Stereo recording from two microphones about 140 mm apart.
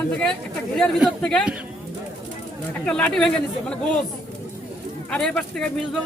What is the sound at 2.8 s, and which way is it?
Speech, 10° left (ahead or behind).